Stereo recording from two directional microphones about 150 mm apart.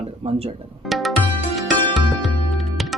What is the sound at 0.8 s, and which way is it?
Music, centre (ahead or behind).